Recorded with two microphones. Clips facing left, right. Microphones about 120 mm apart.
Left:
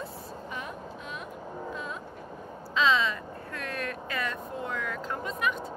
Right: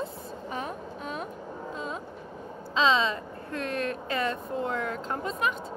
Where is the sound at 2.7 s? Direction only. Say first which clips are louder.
Right 1 dB; 25° right (ahead or behind).